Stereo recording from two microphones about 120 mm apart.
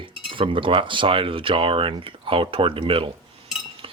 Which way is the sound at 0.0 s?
45° right (ahead or behind).